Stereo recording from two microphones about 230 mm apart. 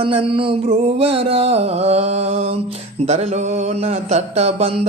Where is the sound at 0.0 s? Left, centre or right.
Right.